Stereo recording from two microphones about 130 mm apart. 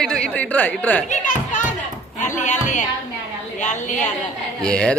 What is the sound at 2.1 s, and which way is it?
A woman's voice, 70° left (ahead or behind).